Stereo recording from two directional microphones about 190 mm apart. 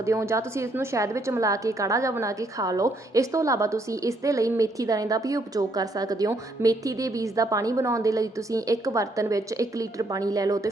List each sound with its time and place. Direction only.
0.0 s a woman's voice: 15° right (ahead or behind)